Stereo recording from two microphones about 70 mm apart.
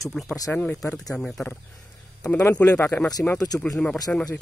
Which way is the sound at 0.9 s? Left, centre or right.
Centre.